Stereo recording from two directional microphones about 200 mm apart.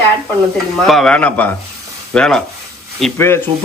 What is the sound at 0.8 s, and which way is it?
A man's voice, centre (ahead or behind).